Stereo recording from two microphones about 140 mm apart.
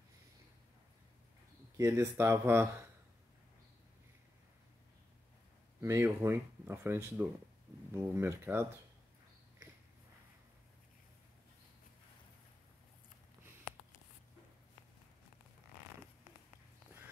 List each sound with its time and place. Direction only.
1.8 s speech: 20° right (ahead or behind)
5.8 s speech: 20° right (ahead or behind)